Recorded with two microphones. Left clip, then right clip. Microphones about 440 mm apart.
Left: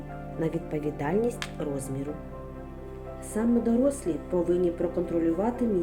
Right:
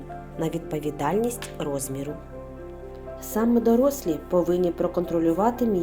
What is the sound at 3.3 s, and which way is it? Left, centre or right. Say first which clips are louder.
A woman's voice: right 5 dB; centre.